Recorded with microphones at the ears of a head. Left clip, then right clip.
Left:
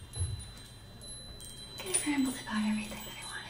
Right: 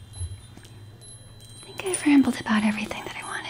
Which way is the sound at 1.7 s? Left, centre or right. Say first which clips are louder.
Right 13 dB; right.